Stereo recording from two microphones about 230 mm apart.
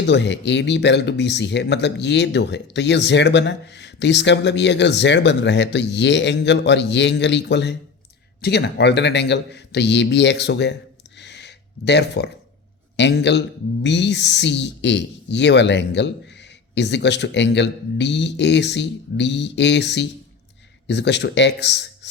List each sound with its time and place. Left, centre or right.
0.0 s speech: left
11.2 s a sound: left
13.0 s speech: left